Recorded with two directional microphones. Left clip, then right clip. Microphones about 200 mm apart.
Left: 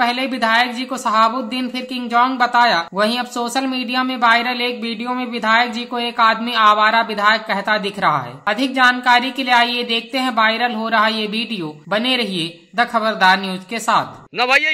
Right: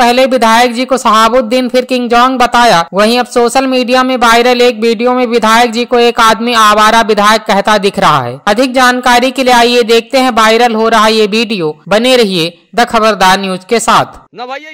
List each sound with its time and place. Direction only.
0.0 s speech: 50° right (ahead or behind)